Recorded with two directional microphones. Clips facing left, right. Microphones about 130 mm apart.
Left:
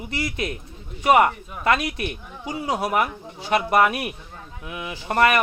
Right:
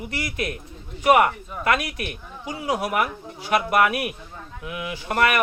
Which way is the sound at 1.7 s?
25° left (ahead or behind).